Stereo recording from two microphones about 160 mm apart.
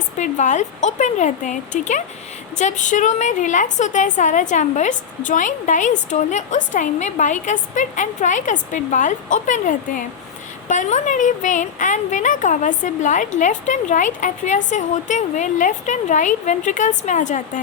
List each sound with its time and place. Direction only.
0.2 s a woman's voice: 50° left (ahead or behind)